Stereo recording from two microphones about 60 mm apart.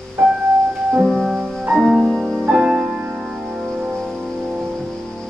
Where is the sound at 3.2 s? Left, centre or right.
Centre.